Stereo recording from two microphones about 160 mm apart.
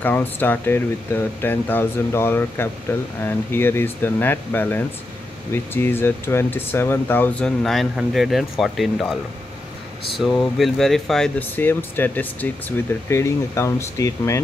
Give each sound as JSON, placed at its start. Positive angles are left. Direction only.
{"t": 0.0, "sound": "speech", "side_deg": 10}